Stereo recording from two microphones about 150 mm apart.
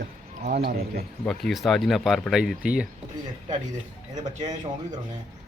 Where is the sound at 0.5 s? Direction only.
90° right.